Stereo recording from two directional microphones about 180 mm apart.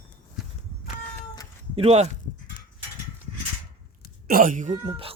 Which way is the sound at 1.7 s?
35° right (ahead or behind).